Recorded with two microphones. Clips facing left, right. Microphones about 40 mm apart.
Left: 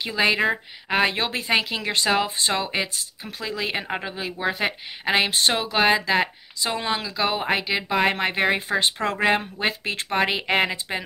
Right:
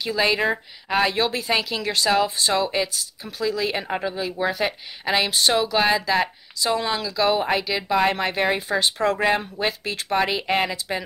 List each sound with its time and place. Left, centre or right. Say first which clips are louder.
0.0 s speech: even; left
1.0 s speech: right 2 dB; left